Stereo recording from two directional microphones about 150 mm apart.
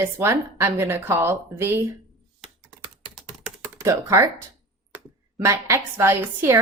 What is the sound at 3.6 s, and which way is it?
Speech, 20° right (ahead or behind).